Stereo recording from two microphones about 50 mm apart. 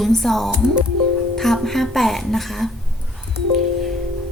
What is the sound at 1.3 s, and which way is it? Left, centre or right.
Music, centre.